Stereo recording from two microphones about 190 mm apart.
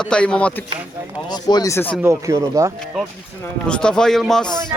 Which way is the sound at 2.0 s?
15° right (ahead or behind).